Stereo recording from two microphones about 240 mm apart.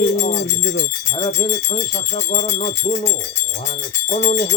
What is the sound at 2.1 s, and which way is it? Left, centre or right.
Speech, left.